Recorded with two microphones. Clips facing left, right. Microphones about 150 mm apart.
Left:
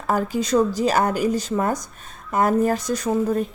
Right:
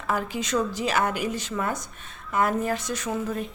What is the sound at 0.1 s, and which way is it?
A woman's voice, 40° left (ahead or behind).